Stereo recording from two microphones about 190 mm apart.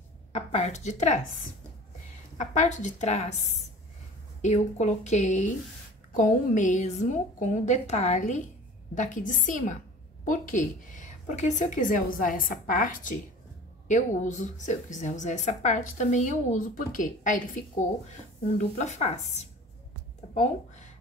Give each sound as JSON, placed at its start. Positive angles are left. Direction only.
{"t": 0.3, "sound": "a woman's voice", "side_deg": 35}
{"t": 2.3, "sound": "a woman's voice", "side_deg": 40}